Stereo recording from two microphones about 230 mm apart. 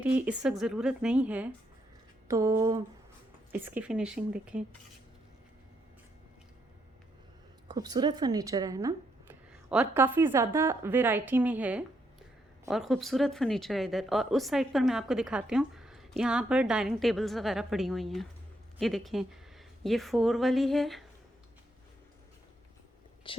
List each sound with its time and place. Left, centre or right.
0.0 s speech: centre
7.7 s speech: centre
23.3 s speech: left